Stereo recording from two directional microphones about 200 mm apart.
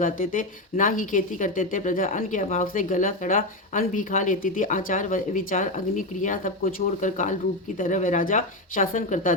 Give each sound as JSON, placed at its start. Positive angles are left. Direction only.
{"t": 0.0, "sound": "speech", "side_deg": 40}